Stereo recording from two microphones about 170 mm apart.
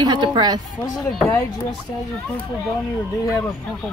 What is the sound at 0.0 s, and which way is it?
Speech, 25° right (ahead or behind).